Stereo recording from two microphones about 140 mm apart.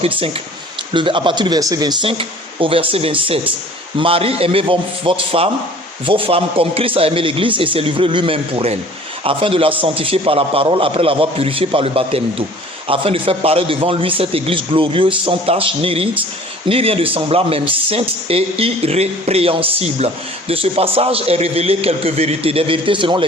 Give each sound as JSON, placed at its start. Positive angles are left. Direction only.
{"t": 0.9, "sound": "a man's voice", "side_deg": -35}